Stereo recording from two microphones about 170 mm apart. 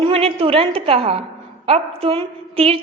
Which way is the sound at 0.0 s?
35° right (ahead or behind).